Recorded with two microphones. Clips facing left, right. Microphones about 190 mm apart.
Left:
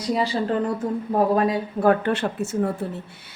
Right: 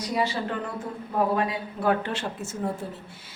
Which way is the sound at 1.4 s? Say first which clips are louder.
Left 7 dB; 45° left (ahead or behind).